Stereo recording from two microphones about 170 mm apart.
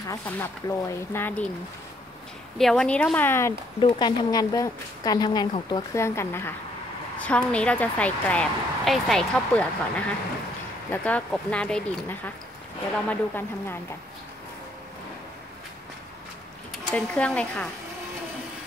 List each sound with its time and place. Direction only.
0.1 s a woman's voice: 15° left (ahead or behind)
2.6 s a woman's voice: 5° left (ahead or behind)
3.8 s speech: 25° left (ahead or behind)
5.9 s a woman's voice: 15° left (ahead or behind)
16.9 s a woman's voice: 5° left (ahead or behind)